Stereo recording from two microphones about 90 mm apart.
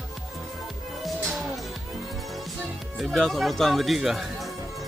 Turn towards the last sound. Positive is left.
turn(degrees=-5)  # may be behind; listen again after turning